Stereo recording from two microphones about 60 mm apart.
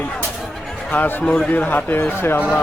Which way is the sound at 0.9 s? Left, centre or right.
Left.